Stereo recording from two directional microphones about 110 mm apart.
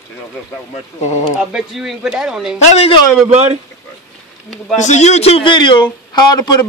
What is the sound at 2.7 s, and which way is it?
Speech, 70° left (ahead or behind).